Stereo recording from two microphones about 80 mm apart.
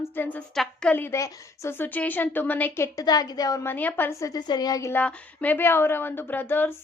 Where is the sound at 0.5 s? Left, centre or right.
Centre.